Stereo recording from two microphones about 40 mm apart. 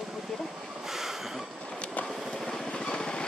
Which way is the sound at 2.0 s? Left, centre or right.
Left.